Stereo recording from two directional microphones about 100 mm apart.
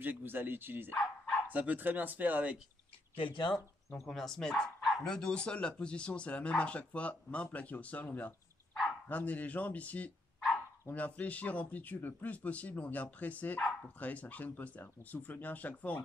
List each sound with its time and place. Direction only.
0.0 s speech: 20° right (ahead or behind)
3.2 s speech: 55° left (ahead or behind)
4.0 s speech: 5° left (ahead or behind)